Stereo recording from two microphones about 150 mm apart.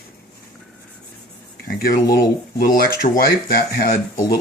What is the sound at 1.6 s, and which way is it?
Speech, 80° left.